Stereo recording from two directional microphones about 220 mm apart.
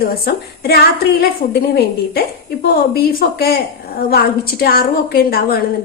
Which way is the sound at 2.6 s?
45° left (ahead or behind).